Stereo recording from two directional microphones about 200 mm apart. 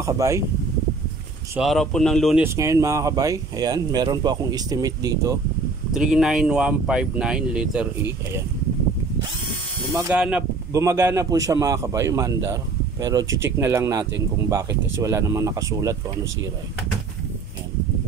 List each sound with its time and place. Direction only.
0.0 s speech: 15° right (ahead or behind)
1.6 s speech: centre (ahead or behind)
2.4 s speech: 15° right (ahead or behind)
5.9 s speech: 5° right (ahead or behind)
10.1 s speech: 5° right (ahead or behind)